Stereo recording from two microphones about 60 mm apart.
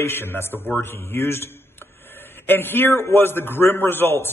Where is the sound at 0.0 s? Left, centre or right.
Left.